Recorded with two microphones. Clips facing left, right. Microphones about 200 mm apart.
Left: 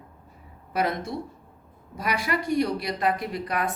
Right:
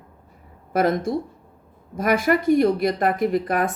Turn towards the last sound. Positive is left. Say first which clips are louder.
# right 8 dB
turn(degrees=-50)  # may be behind; listen again after turning